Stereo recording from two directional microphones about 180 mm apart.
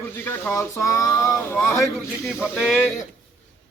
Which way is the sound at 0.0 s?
10° left (ahead or behind).